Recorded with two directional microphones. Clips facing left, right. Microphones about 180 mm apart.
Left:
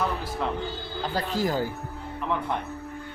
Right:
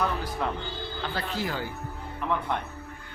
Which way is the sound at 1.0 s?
40° left (ahead or behind).